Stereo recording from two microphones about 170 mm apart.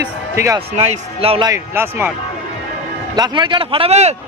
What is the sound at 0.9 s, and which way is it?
Speech, 35° right (ahead or behind).